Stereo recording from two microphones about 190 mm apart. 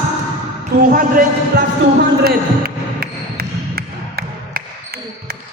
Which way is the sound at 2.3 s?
55° right (ahead or behind).